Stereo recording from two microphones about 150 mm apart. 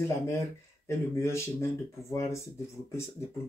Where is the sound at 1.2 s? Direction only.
20° left (ahead or behind).